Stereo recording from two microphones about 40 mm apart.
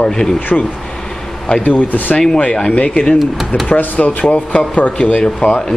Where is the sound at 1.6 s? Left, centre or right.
Left.